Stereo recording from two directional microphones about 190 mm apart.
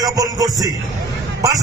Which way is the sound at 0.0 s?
20° right (ahead or behind).